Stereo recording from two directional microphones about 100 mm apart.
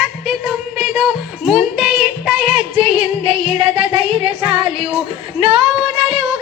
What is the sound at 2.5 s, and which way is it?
Music, 60° right (ahead or behind).